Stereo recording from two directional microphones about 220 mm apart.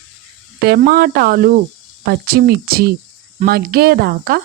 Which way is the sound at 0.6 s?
45° right (ahead or behind).